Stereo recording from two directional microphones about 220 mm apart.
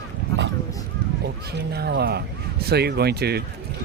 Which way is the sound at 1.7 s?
45° right (ahead or behind).